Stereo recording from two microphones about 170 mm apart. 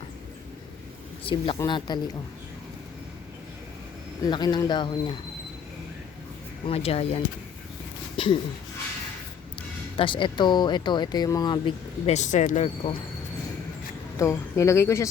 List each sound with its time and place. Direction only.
1.2 s speech: 30° left (ahead or behind)
4.3 s speech: 25° left (ahead or behind)
6.7 s speech: 35° left (ahead or behind)
10.0 s speech: 30° left (ahead or behind)
12.1 s speech: 45° left (ahead or behind)
14.2 s speech: 15° left (ahead or behind)